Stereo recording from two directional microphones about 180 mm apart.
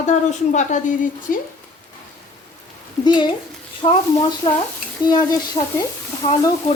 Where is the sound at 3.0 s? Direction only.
25° left (ahead or behind).